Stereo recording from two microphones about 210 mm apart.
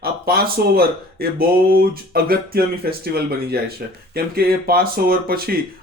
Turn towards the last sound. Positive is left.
turn(degrees=-45)  # may be behind; listen again after turning